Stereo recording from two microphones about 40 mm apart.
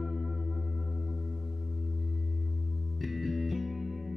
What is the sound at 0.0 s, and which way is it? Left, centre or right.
Music, centre.